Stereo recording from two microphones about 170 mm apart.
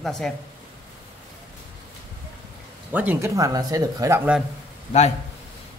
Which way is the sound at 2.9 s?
10° right (ahead or behind).